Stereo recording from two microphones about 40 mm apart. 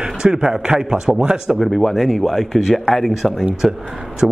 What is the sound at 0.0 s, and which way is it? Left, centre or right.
A man's voice, centre.